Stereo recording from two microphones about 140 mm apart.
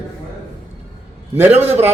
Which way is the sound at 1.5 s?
50° right (ahead or behind).